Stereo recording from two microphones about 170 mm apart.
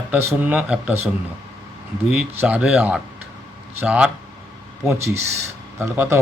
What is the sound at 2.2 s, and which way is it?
A man's voice, 10° right (ahead or behind).